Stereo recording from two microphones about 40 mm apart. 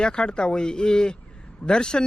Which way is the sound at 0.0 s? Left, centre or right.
Left.